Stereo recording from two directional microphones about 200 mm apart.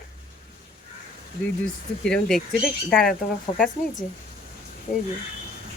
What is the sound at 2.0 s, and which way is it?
Fart, 5° left (ahead or behind).